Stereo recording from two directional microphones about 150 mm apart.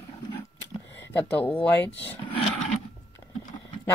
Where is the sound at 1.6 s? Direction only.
10° left (ahead or behind).